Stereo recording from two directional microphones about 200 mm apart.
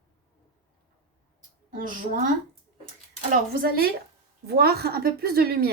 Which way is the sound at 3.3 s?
50° right (ahead or behind).